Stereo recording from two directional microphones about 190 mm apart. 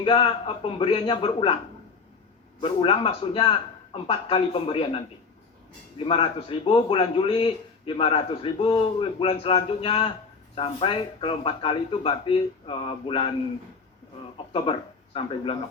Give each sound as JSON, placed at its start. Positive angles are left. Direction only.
{"t": 0.0, "sound": "a man's voice", "side_deg": 30}
{"t": 2.6, "sound": "a man's voice", "side_deg": 30}
{"t": 6.1, "sound": "a man's voice", "side_deg": 30}
{"t": 14.5, "sound": "speech", "side_deg": 30}